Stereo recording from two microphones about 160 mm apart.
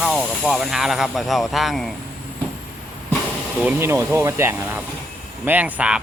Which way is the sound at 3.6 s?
10° right (ahead or behind).